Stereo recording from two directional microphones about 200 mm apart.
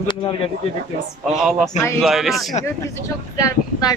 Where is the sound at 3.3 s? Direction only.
15° left (ahead or behind).